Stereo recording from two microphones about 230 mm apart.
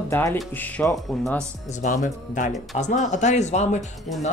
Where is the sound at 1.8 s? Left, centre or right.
Left.